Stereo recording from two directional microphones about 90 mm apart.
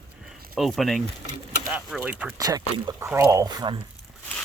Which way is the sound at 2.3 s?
45° right (ahead or behind).